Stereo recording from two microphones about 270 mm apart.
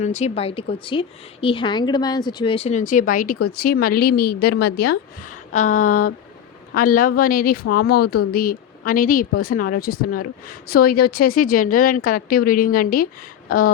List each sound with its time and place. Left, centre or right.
0.0 s a woman's voice: left